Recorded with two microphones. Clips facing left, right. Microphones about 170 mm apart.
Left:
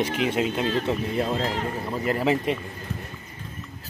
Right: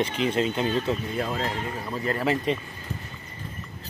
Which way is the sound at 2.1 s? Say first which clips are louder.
Left 2 dB; 10° left (ahead or behind).